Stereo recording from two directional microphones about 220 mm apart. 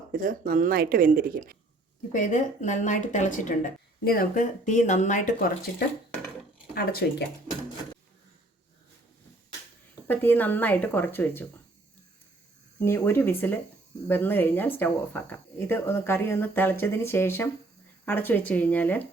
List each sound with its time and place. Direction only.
0.1 s speech: 40° right (ahead or behind)
2.1 s speech: 35° left (ahead or behind)
6.7 s speech: 45° left (ahead or behind)
10.1 s speech: 10° left (ahead or behind)
12.8 s speech: 10° left (ahead or behind)